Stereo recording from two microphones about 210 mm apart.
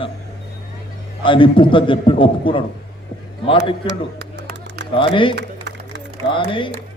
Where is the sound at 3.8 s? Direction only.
50° right (ahead or behind).